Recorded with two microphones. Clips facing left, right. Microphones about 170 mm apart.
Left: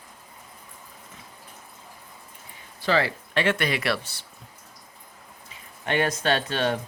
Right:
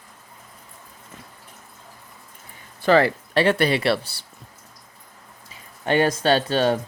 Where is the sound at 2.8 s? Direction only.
50° right (ahead or behind).